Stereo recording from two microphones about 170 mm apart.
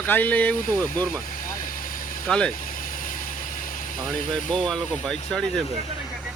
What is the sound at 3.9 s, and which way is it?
Speech, 50° left (ahead or behind).